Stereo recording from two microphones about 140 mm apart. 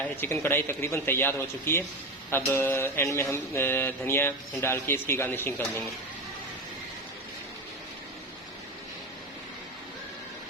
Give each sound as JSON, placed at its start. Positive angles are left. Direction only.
{"t": 0.2, "sound": "mantra", "side_deg": 15}